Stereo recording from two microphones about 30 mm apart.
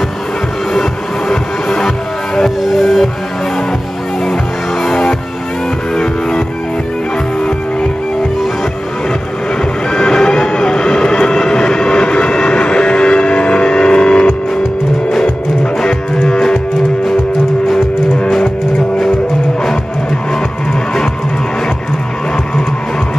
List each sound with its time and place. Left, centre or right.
2.8 s music: centre
9.9 s vehicle: left
15.8 s music: left